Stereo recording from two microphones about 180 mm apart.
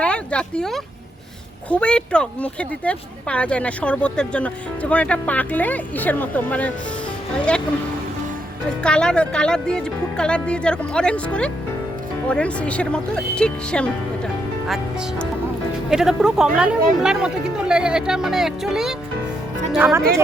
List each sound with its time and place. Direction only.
0.0 s speech: 5° left (ahead or behind)
8.8 s speech: 5° left (ahead or behind)
15.9 s speech: 5° right (ahead or behind)